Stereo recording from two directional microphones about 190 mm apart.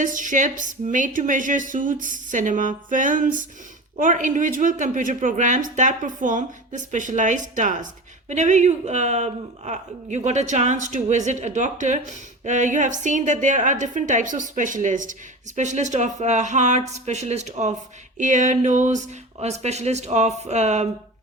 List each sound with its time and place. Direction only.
0.0 s speech: 45° right (ahead or behind)